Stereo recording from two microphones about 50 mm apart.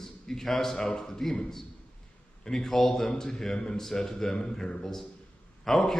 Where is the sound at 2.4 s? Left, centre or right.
Centre.